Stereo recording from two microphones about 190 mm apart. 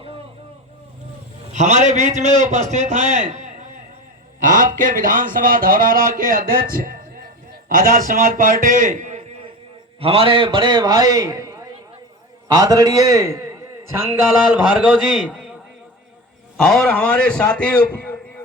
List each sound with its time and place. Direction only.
1.5 s a man's voice: 40° right (ahead or behind); by 13.6 s 15° right (ahead or behind)
14.5 s a man's voice: 5° right (ahead or behind)
16.6 s a man's voice: 5° left (ahead or behind)